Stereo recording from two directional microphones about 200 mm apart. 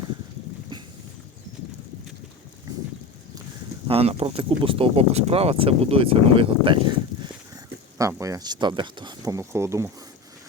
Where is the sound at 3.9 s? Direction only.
30° right (ahead or behind).